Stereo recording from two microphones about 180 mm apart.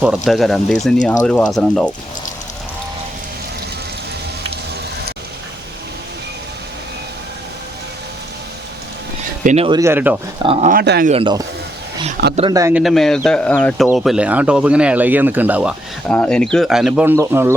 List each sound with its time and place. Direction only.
0.0 s speech: centre (ahead or behind)
9.4 s speech: 45° right (ahead or behind)
9.6 s speech: 20° right (ahead or behind)
10.4 s speech: 30° right (ahead or behind)
10.7 s speech: 60° right (ahead or behind)
11.1 s speech: 25° right (ahead or behind)
12.7 s speech: centre (ahead or behind)
16.0 s speech: 5° left (ahead or behind); by 17.5 s 15° right (ahead or behind)